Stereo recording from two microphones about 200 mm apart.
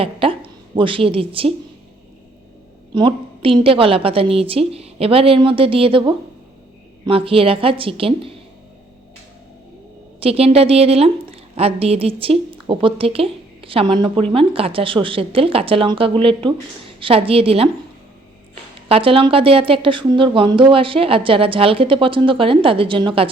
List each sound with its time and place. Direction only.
0.0 s a woman's voice: 30° right (ahead or behind)
2.9 s a woman's voice: 25° right (ahead or behind)
10.2 s a woman's voice: 30° right (ahead or behind)
18.9 s a woman's voice: 30° right (ahead or behind)